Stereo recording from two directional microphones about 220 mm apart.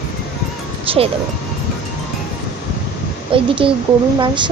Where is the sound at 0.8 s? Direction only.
25° right (ahead or behind).